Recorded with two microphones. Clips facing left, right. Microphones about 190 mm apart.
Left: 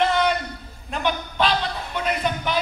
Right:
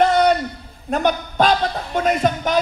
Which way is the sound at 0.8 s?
45° right (ahead or behind).